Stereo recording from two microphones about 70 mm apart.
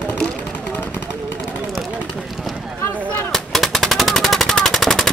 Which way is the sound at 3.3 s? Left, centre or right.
Centre.